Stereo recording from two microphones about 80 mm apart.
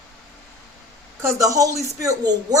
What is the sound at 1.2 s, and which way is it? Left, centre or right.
Speech, right.